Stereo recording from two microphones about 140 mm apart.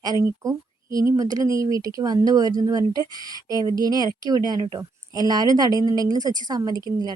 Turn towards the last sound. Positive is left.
turn(degrees=-25)  # may be behind; listen again after turning